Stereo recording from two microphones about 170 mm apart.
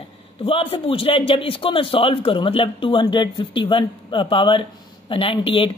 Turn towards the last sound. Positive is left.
turn(degrees=35)  # may be behind; listen again after turning